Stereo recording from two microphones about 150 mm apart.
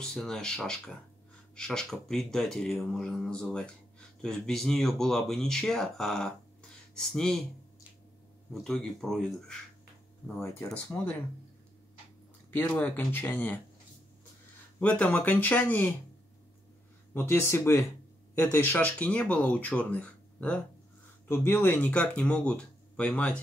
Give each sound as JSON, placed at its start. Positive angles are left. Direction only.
{"t": 0.0, "sound": "speech", "side_deg": 5}
{"t": 8.5, "sound": "speech", "side_deg": 0}
{"t": 10.6, "sound": "speech", "side_deg": 10}
{"t": 12.4, "sound": "speech", "side_deg": 10}
{"t": 14.8, "sound": "speech", "side_deg": 10}
{"t": 17.1, "sound": "speech", "side_deg": 15}